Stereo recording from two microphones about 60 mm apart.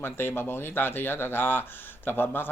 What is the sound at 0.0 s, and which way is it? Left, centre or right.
Speech, left.